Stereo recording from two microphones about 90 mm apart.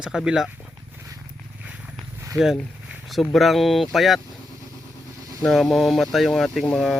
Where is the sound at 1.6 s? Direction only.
10° right (ahead or behind).